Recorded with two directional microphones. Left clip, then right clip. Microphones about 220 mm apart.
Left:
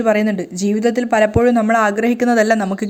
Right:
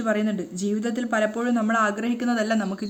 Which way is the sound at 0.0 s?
25° left (ahead or behind).